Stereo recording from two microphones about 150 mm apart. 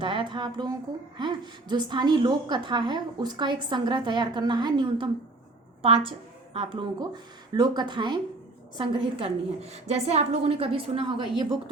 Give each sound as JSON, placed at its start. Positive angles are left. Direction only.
{"t": 0.0, "sound": "a woman's voice", "side_deg": -35}